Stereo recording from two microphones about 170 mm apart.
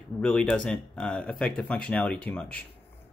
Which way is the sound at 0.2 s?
5° left (ahead or behind).